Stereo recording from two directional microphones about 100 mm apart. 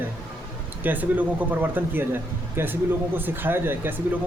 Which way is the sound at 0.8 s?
15° right (ahead or behind).